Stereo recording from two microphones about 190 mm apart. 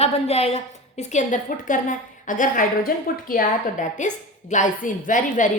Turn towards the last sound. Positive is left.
turn(degrees=45)  # may be behind; listen again after turning